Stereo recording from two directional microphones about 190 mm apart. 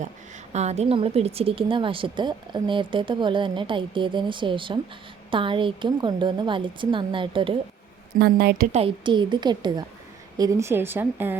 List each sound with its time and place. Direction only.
0.5 s speech: 35° right (ahead or behind)
8.2 s a woman's voice: 55° right (ahead or behind)
8.7 s speech: 30° right (ahead or behind); by 11.3 s 10° right (ahead or behind)